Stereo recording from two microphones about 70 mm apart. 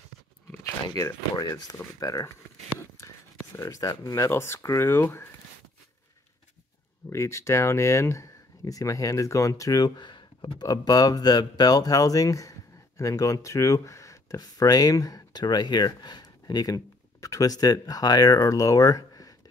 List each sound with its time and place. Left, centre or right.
1.0 s speech: left
3.5 s speech: left
7.1 s speech: left
9.8 s speech: left
14.4 s speech: left